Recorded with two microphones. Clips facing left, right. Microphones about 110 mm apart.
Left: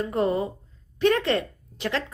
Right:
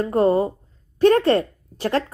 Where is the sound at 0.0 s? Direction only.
40° right (ahead or behind).